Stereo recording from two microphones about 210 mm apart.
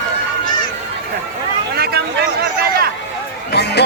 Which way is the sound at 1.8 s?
50° right (ahead or behind).